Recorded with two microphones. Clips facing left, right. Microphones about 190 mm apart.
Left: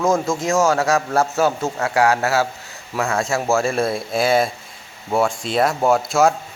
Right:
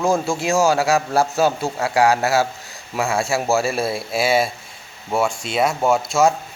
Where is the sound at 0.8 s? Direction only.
15° right (ahead or behind).